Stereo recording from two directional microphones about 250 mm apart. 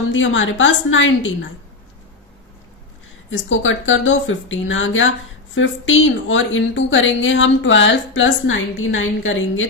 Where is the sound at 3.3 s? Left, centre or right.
Left.